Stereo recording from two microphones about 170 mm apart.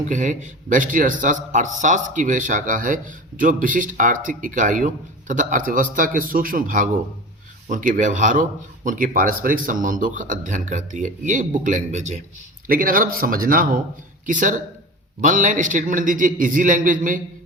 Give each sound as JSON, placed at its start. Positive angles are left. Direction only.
{"t": 0.0, "sound": "a man's voice", "side_deg": -45}
{"t": 12.6, "sound": "a man's voice", "side_deg": -55}